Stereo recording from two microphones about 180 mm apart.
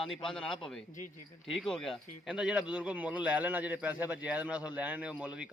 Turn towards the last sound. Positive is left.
turn(degrees=-10)  # may be behind; listen again after turning